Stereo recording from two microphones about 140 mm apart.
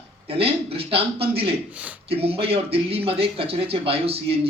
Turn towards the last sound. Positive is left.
turn(degrees=-45)  # may be behind; listen again after turning